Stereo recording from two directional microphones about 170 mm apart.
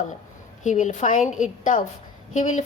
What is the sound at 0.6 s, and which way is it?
A woman's voice, 45° left (ahead or behind).